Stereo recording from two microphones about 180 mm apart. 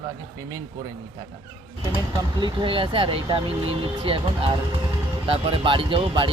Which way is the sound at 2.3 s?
25° right (ahead or behind).